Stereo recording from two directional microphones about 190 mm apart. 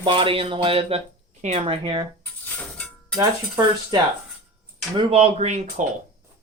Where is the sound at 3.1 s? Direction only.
20° right (ahead or behind).